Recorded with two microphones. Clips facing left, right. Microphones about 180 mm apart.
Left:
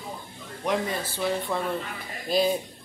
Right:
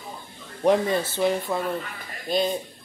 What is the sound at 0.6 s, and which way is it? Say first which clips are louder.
Speech: right 7 dB; 30° right (ahead or behind).